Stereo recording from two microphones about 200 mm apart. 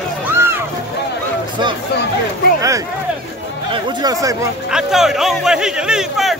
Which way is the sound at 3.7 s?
25° right (ahead or behind).